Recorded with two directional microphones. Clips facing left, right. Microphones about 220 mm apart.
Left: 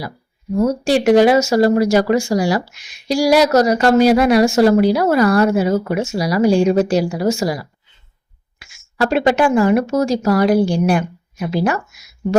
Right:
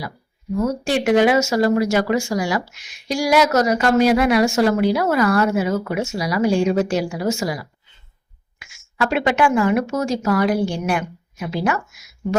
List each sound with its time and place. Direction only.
0.6 s speech: 35° left (ahead or behind)